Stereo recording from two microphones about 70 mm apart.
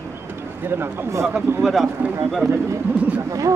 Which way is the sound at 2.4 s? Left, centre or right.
Right.